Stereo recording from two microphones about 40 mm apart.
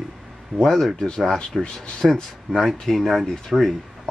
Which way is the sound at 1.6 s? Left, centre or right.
Left.